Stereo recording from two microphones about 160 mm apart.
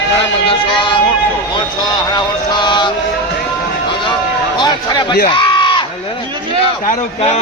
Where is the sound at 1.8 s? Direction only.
30° left (ahead or behind).